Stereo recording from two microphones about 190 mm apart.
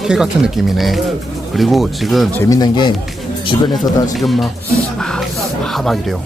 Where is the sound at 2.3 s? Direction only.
20° left (ahead or behind).